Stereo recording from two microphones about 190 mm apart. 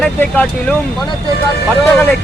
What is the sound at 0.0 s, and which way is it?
Speech, 10° left (ahead or behind).